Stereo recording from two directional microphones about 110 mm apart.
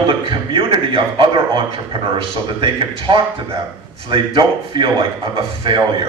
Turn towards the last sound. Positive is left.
turn(degrees=-50)  # may be behind; listen again after turning